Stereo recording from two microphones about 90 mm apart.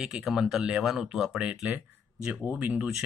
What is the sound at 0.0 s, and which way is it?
Speech, 5° right (ahead or behind).